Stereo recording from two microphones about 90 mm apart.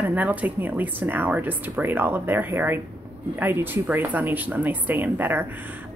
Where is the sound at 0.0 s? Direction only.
20° right (ahead or behind).